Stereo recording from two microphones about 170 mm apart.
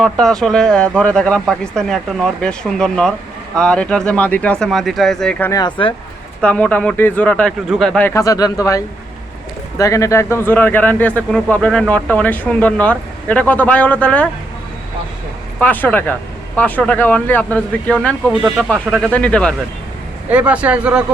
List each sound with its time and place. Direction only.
0.0 s speech: 5° left (ahead or behind)
5.5 s speech: 25° left (ahead or behind)
6.4 s speech: 10° left (ahead or behind)
15.5 s speech: 10° left (ahead or behind)
20.3 s speech: 10° right (ahead or behind)